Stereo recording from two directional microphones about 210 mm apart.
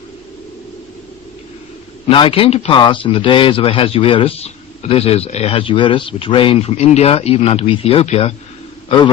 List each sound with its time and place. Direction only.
2.0 s speech: 25° left (ahead or behind)